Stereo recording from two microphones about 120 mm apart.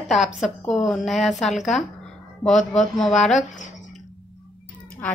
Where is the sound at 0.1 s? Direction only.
Centre (ahead or behind).